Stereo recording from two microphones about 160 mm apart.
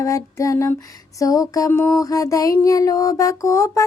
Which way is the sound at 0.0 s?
20° left (ahead or behind).